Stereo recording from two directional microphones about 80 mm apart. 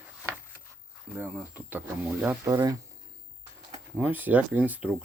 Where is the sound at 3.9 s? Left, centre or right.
Right.